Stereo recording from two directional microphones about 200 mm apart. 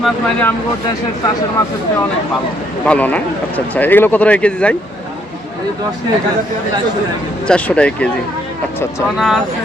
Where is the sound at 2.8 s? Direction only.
5° left (ahead or behind).